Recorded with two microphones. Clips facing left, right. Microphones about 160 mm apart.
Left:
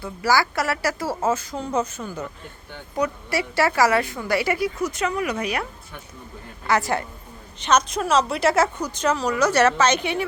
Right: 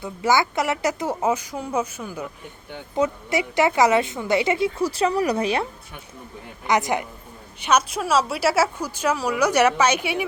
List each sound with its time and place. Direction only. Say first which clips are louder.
0.0 s a woman's voice: right 1 dB; 20° right (ahead or behind)
2.7 s a woman's voice: right 2 dB; 20° right (ahead or behind)
6.7 s a woman's voice: right 1 dB; 20° right (ahead or behind)